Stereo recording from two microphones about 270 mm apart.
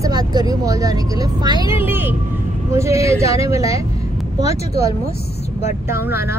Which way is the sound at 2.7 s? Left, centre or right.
Centre.